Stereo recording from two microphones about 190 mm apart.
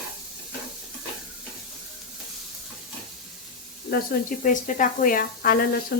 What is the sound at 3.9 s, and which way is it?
Speech, 50° left (ahead or behind).